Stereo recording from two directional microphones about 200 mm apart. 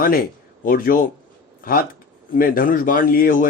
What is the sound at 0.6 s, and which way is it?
Speech, 45° left (ahead or behind).